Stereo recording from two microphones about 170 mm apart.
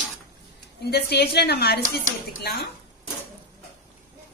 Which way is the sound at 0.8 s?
70° left (ahead or behind).